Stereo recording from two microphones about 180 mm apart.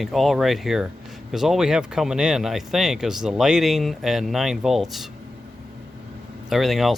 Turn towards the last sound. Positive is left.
turn(degrees=0)  # may be behind; listen again after turning